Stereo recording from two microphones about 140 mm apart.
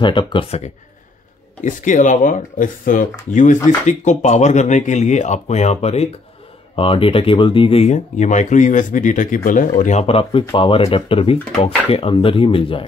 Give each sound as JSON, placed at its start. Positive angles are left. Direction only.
{"t": 0.0, "sound": "speech", "side_deg": 35}
{"t": 1.6, "sound": "speech", "side_deg": 65}
{"t": 9.8, "sound": "speech", "side_deg": 60}
{"t": 10.0, "sound": "speech", "side_deg": 40}